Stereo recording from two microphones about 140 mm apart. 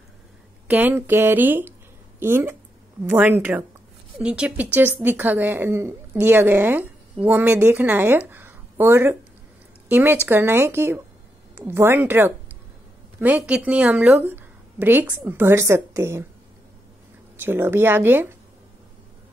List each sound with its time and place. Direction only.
0.7 s a woman's voice: 15° right (ahead or behind)
17.4 s a woman's voice: 15° right (ahead or behind)